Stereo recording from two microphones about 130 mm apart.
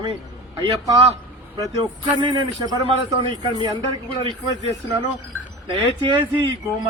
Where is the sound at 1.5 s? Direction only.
35° right (ahead or behind).